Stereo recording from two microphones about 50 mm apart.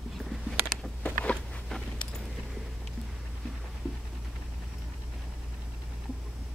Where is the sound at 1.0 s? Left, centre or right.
Left.